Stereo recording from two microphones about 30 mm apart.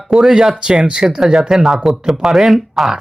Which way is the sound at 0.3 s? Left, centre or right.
Right.